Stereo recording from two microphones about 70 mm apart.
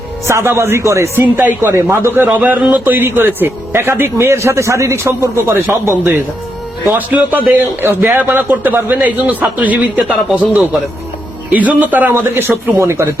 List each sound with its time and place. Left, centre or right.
0.3 s a man's voice: right
6.9 s a man's voice: right
10.1 s speech: centre
11.5 s a man's voice: right